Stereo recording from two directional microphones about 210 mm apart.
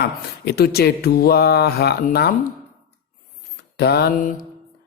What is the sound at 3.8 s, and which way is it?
Speech, 50° left (ahead or behind).